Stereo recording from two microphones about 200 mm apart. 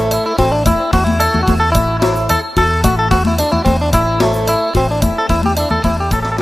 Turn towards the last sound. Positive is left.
turn(degrees=0)  # may be behind; listen again after turning